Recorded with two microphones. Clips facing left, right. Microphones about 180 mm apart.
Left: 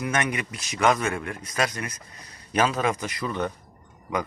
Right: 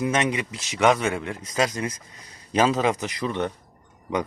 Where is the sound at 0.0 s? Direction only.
20° right (ahead or behind).